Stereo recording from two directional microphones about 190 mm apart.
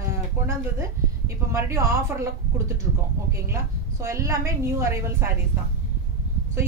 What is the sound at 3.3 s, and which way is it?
Speech, 15° right (ahead or behind).